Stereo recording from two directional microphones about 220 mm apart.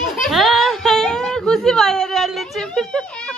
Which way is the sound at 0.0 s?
Centre (ahead or behind).